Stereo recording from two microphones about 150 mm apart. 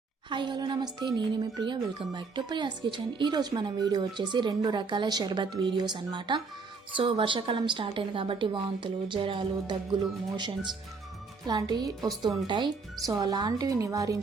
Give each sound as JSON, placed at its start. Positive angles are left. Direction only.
{"t": 0.3, "sound": "a woman's voice", "side_deg": -30}